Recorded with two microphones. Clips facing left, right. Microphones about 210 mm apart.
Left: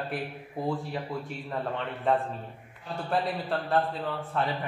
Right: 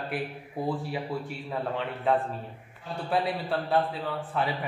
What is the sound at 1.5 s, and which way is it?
A man's voice, centre (ahead or behind).